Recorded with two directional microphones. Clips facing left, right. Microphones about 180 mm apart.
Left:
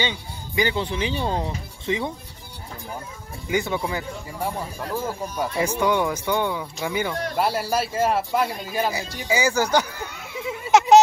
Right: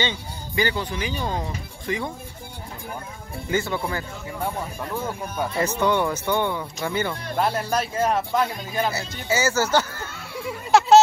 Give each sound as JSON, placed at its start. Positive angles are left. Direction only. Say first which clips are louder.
{"t": 0.0, "sound": "speech", "louder": "even", "side_deg": 15}
{"t": 3.4, "sound": "speech", "louder": "left 1 dB", "side_deg": 15}
{"t": 4.9, "sound": "speech", "louder": "left 1 dB", "side_deg": 5}
{"t": 9.3, "sound": "a sound", "louder": "even", "side_deg": 15}